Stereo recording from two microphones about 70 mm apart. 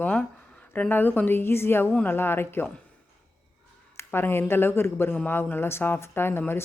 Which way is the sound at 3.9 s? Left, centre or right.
Left.